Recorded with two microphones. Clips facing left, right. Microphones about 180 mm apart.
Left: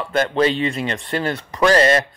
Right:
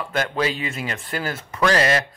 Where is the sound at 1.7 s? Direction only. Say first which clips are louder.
Left 5 dB; 40° left (ahead or behind).